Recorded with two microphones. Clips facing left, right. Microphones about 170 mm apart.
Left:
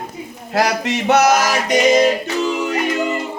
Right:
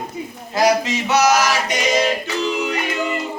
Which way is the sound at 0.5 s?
60° left (ahead or behind).